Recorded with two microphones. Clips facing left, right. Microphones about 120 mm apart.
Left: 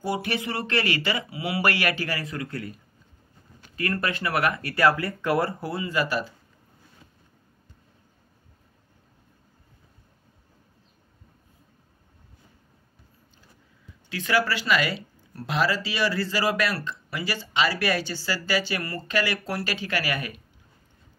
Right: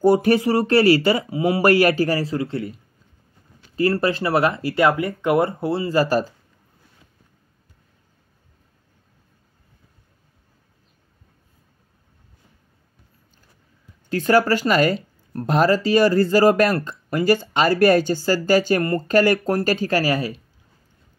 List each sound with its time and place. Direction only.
0.0 s speech: 40° right (ahead or behind)
14.0 s speech: 45° right (ahead or behind)